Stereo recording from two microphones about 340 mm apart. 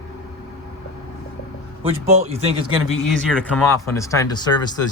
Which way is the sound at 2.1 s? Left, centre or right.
Centre.